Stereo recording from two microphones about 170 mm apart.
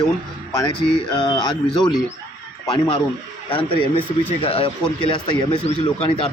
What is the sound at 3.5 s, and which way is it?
A man's voice, 30° left (ahead or behind).